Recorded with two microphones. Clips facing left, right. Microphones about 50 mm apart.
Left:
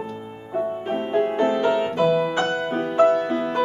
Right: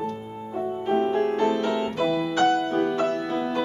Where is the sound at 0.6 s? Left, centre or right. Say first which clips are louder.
Even; left.